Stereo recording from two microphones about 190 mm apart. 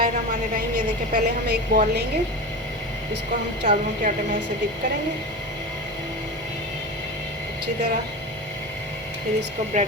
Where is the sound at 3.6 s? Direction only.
45° right (ahead or behind).